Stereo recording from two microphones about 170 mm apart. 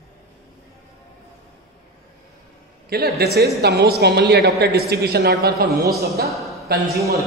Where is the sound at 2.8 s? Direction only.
65° right (ahead or behind).